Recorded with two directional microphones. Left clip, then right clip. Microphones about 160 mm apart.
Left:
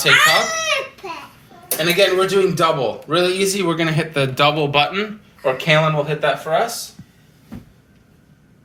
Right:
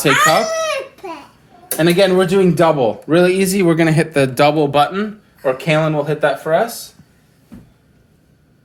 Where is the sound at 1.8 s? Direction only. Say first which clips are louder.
Right 2 dB; 60° right (ahead or behind).